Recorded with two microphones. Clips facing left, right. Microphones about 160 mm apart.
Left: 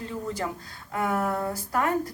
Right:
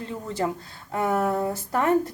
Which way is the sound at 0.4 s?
30° right (ahead or behind).